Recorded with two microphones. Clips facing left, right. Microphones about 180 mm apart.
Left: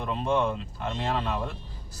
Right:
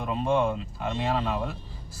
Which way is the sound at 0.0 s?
5° right (ahead or behind).